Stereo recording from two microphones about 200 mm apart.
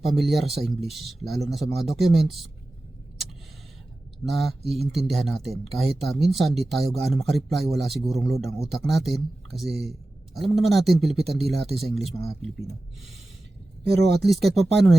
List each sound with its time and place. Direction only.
0.0 s speech: centre (ahead or behind)
4.3 s speech: centre (ahead or behind)
9.6 s speech: 55° right (ahead or behind)
10.4 s speech: centre (ahead or behind)
14.2 s speech: centre (ahead or behind)